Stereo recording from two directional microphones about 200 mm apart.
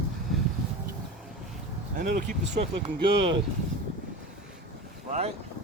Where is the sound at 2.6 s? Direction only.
25° right (ahead or behind).